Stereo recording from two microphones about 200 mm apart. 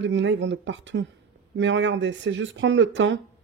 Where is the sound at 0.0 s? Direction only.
65° right (ahead or behind).